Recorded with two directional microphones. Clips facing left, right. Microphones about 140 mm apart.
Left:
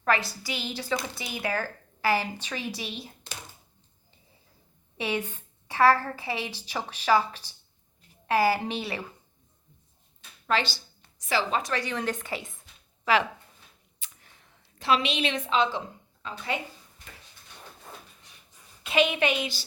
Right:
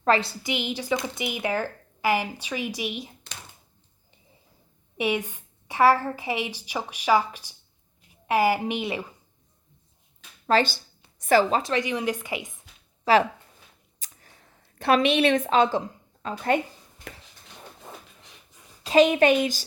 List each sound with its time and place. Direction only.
0.0 s speech: 25° right (ahead or behind)
4.9 s speech: 15° right (ahead or behind)
10.4 s a woman's voice: 45° right (ahead or behind)
11.5 s speech: 25° right (ahead or behind)
13.1 s speech: 35° right (ahead or behind)
14.0 s a sound: 40° right (ahead or behind)
16.2 s speech: 50° right (ahead or behind)
18.8 s a woman's voice: 40° right (ahead or behind)